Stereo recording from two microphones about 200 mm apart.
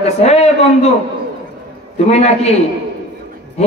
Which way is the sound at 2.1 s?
30° left (ahead or behind).